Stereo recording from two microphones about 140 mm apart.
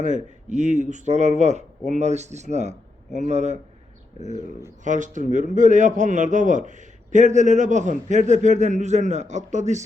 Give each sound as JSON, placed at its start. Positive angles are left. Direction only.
{"t": 0.0, "sound": "a man's voice", "side_deg": -60}
{"t": 4.8, "sound": "a man's voice", "side_deg": -65}